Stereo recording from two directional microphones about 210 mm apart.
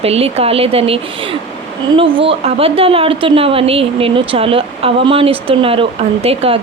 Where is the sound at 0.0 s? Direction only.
30° right (ahead or behind).